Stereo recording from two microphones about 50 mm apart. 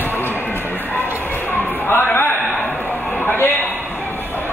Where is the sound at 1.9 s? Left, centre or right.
Left.